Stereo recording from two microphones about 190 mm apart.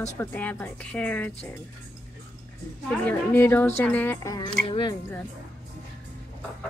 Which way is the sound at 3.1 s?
10° left (ahead or behind).